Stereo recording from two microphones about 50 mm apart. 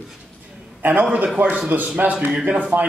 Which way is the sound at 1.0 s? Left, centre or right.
Right.